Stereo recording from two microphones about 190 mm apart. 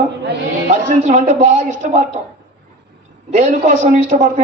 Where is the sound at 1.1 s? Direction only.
40° right (ahead or behind).